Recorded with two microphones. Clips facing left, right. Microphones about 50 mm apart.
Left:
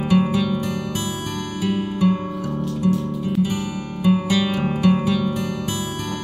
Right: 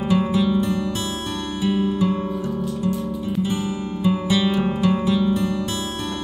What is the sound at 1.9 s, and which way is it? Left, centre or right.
Music, left.